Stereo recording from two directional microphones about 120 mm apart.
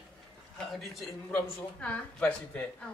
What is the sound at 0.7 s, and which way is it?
Speech, centre (ahead or behind).